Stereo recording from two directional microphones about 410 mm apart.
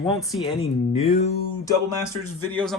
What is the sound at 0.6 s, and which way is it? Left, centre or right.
Speech, centre.